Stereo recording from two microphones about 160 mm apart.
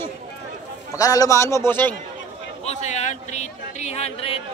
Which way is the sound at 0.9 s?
20° left (ahead or behind).